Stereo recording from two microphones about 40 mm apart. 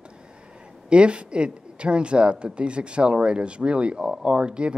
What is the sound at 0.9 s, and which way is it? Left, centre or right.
Speech, right.